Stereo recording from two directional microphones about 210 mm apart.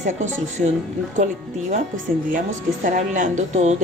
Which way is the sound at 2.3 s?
40° right (ahead or behind).